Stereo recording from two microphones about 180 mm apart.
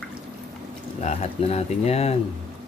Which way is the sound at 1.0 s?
35° left (ahead or behind).